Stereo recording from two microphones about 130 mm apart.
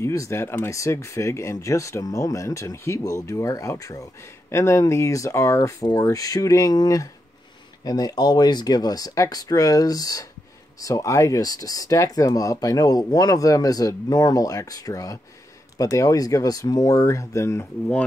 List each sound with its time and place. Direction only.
0.0 s speech: 25° left (ahead or behind)